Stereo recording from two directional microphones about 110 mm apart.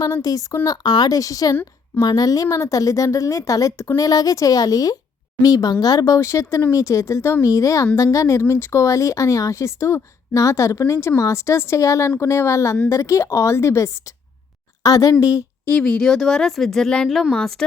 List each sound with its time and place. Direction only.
0.0 s a woman's voice: 35° left (ahead or behind)
15.6 s speech: 10° left (ahead or behind)